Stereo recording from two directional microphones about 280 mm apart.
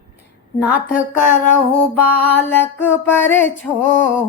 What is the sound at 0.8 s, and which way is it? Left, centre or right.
Speech, left.